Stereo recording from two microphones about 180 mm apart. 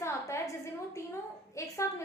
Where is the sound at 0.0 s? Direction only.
15° left (ahead or behind).